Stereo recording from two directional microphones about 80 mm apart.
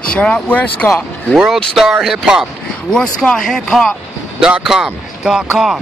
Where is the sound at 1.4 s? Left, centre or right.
Centre.